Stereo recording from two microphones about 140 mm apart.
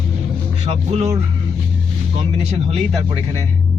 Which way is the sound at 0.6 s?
50° right (ahead or behind).